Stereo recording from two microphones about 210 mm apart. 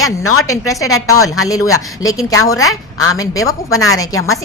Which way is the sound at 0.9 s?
90° left.